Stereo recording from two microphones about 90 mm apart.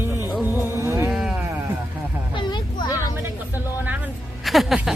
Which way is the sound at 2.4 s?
55° left (ahead or behind).